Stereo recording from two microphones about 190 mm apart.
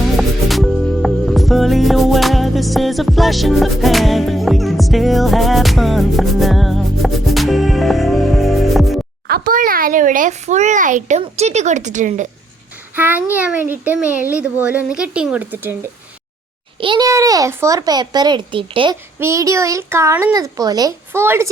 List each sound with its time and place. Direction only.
0.2 s music: centre (ahead or behind)
9.2 s a child's voice: 50° right (ahead or behind)
13.0 s a child's voice: 10° right (ahead or behind)
16.8 s a child's voice: 25° right (ahead or behind)
19.2 s a child's voice: 15° right (ahead or behind)